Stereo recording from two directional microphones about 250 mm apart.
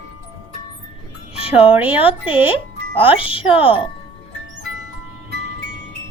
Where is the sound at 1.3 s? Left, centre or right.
Left.